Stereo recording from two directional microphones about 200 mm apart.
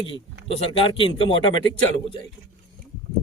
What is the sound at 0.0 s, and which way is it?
A man's voice, 30° left (ahead or behind).